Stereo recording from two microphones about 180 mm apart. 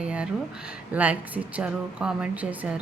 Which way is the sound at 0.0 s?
5° right (ahead or behind).